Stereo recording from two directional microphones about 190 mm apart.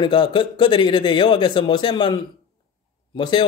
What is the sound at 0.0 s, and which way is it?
A man's voice, 25° left (ahead or behind).